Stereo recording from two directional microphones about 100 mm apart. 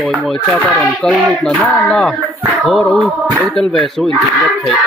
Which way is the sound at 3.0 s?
15° right (ahead or behind).